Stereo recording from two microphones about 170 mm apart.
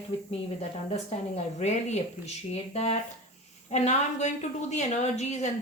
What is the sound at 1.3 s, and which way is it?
A woman's voice, 40° left (ahead or behind).